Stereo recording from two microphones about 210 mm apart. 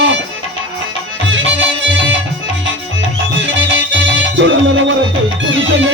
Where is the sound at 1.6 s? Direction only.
65° right (ahead or behind).